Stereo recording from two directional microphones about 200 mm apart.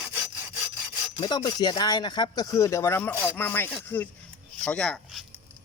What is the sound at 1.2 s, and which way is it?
Speech, 20° left (ahead or behind).